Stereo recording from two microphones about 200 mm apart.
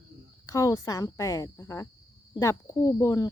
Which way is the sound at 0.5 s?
15° left (ahead or behind).